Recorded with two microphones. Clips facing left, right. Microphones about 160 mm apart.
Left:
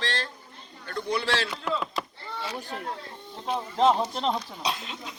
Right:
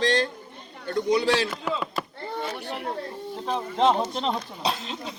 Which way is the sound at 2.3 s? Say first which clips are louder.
Right 3 dB; 55° right (ahead or behind).